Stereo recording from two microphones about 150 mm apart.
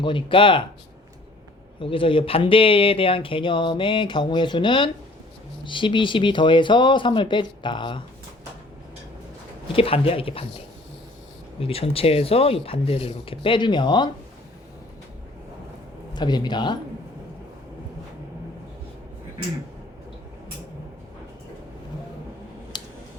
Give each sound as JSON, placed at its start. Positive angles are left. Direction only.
{"t": 0.0, "sound": "speech", "side_deg": 35}
{"t": 1.8, "sound": "speech", "side_deg": 35}
{"t": 9.7, "sound": "speech", "side_deg": 40}
{"t": 11.6, "sound": "speech", "side_deg": 40}
{"t": 16.1, "sound": "speech", "side_deg": 30}
{"t": 22.7, "sound": "a sound", "side_deg": 30}